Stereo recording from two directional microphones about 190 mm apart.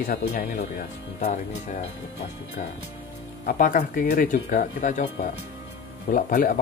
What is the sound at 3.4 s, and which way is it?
Speech, 45° left (ahead or behind).